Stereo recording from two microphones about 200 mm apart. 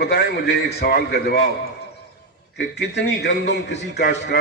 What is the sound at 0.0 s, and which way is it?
A man's voice, 50° left (ahead or behind).